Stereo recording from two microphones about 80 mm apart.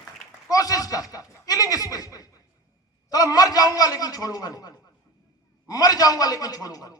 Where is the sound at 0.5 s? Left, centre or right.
Left.